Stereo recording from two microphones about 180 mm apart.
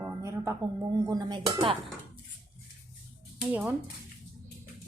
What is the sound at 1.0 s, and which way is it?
Speech, 20° right (ahead or behind).